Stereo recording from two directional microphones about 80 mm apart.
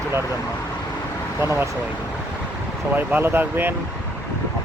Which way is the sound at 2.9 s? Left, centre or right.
Right.